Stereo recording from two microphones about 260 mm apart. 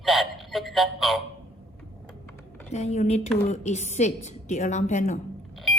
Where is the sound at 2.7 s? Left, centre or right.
Left.